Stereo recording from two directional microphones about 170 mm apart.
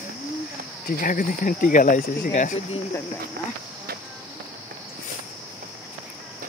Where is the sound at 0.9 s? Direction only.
55° left (ahead or behind).